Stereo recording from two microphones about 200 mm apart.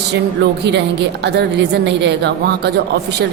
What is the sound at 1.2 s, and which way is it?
A woman's voice, 55° right (ahead or behind).